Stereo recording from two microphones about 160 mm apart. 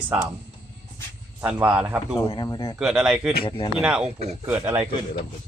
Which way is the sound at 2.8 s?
5° right (ahead or behind).